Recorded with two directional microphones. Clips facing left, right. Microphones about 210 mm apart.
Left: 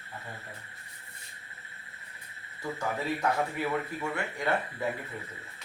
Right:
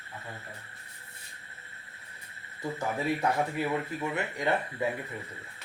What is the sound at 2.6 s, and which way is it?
Speech, 20° right (ahead or behind).